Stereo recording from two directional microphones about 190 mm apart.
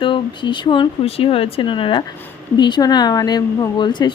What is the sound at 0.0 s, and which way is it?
Speech, 25° left (ahead or behind).